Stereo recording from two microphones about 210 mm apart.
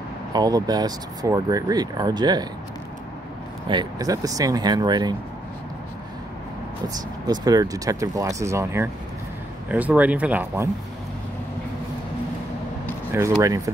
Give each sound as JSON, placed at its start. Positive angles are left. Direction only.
{"t": 0.3, "sound": "speech", "side_deg": -20}
{"t": 3.6, "sound": "speech", "side_deg": -20}
{"t": 7.2, "sound": "speech", "side_deg": -20}
{"t": 13.1, "sound": "speech", "side_deg": -15}